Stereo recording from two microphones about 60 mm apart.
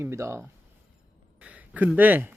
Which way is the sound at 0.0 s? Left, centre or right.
Right.